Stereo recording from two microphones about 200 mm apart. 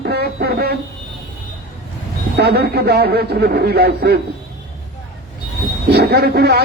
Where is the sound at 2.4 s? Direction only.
55° right (ahead or behind).